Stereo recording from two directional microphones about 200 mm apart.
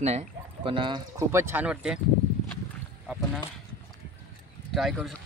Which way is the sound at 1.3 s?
10° right (ahead or behind).